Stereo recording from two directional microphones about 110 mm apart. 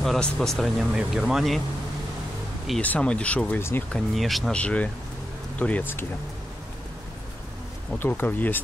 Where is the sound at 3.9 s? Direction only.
Centre (ahead or behind).